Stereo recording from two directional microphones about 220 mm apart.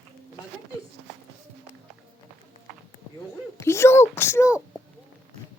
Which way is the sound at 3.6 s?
10° left (ahead or behind).